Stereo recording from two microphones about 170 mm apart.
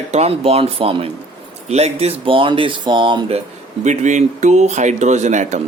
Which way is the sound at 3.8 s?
45° right (ahead or behind).